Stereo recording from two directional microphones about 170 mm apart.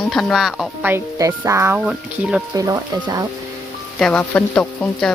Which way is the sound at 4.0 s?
5° left (ahead or behind).